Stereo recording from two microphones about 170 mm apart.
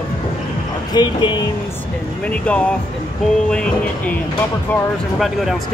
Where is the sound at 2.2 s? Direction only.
5° left (ahead or behind).